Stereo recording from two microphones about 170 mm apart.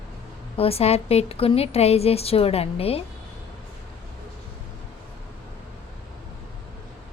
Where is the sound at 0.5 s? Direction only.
35° left (ahead or behind).